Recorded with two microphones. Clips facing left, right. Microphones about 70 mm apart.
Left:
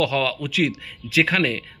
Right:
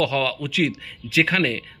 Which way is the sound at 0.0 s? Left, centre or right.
Right.